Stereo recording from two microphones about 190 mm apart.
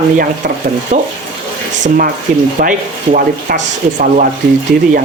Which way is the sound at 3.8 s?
45° right (ahead or behind).